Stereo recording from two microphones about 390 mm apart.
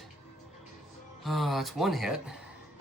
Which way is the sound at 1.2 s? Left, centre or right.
Centre.